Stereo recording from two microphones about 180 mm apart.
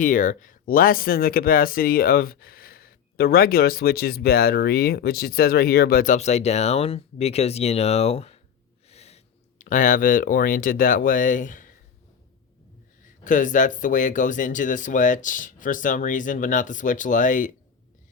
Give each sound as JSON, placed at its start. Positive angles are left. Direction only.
{"t": 0.0, "sound": "speech", "side_deg": 45}
{"t": 13.2, "sound": "speech", "side_deg": 45}